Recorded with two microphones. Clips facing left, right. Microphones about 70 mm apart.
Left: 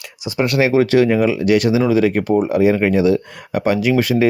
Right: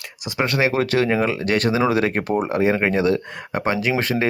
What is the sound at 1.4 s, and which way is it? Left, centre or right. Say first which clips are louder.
Speech: left 5 dB; right.